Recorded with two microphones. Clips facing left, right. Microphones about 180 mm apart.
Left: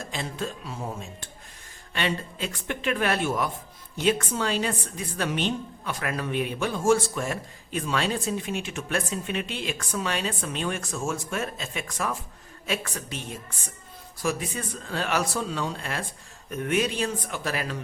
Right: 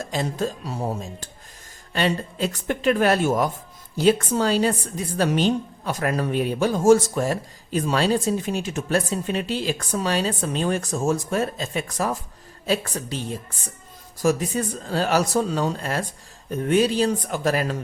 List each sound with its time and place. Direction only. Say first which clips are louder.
0.0 s a woman's voice: right 7 dB; 40° right (ahead or behind)